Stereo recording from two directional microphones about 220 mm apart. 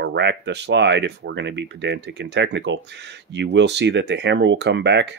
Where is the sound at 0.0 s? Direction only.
50° right (ahead or behind).